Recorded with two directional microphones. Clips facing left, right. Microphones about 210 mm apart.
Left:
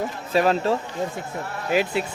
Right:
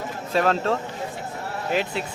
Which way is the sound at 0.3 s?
5° left (ahead or behind).